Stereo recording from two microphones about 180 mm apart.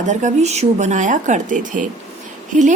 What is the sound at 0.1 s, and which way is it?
A woman's voice, 40° right (ahead or behind).